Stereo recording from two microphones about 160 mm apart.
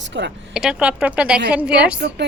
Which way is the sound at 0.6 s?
5° right (ahead or behind).